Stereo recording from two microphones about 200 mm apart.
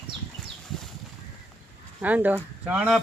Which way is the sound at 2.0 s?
10° right (ahead or behind).